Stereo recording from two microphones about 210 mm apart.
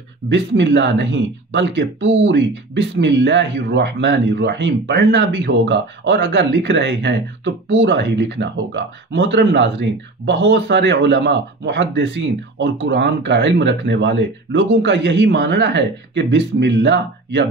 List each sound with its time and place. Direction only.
0.3 s speech: 55° right (ahead or behind)